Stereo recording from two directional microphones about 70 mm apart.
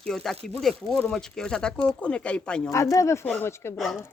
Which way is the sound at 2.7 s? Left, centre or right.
Left.